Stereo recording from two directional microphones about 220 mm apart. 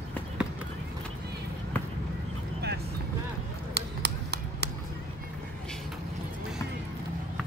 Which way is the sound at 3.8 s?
50° right (ahead or behind).